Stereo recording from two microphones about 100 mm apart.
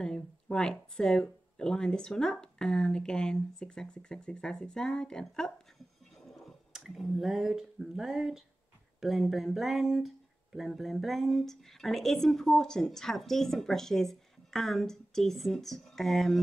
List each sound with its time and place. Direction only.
0.0 s speech: 5° left (ahead or behind)